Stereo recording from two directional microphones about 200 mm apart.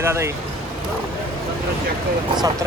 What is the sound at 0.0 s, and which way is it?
Speech, 15° right (ahead or behind).